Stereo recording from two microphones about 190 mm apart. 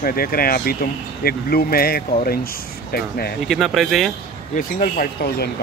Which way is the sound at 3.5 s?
Centre (ahead or behind).